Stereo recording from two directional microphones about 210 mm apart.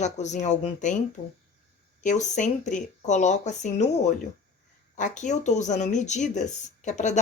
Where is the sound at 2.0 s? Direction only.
35° left (ahead or behind).